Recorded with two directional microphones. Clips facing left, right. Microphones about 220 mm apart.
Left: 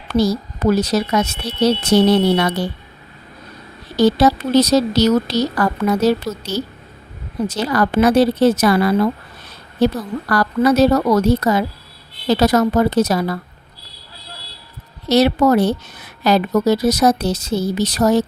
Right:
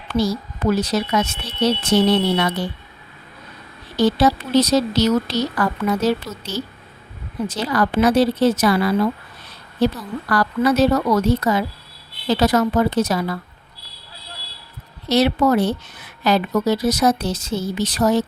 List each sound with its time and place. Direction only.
0.1 s a woman's voice: 40° left (ahead or behind)
3.9 s a woman's voice: 40° left (ahead or behind)
15.0 s a woman's voice: 40° left (ahead or behind)